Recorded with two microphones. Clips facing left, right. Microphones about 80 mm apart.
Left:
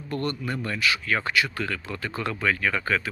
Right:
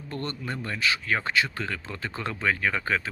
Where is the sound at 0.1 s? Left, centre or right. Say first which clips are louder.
Left 4 dB; right.